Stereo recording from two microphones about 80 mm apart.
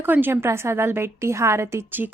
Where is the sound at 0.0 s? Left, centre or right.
Right.